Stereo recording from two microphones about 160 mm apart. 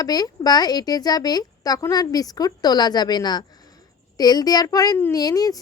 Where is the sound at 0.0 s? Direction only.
25° left (ahead or behind).